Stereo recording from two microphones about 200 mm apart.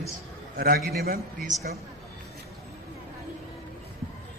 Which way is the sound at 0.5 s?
45° right (ahead or behind).